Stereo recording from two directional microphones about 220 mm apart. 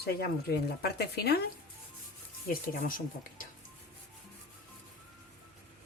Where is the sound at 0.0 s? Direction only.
45° left (ahead or behind).